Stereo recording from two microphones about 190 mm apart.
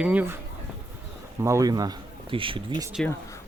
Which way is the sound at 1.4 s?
15° right (ahead or behind).